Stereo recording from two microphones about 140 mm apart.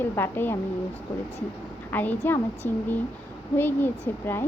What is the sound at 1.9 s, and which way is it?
Speech, 15° left (ahead or behind).